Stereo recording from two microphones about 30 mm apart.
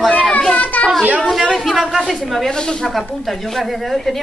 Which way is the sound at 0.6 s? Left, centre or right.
Left.